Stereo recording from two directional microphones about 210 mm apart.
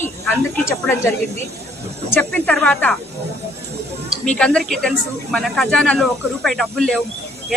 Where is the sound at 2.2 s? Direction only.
5° left (ahead or behind).